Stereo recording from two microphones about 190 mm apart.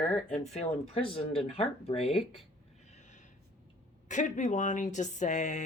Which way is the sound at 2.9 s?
40° left (ahead or behind).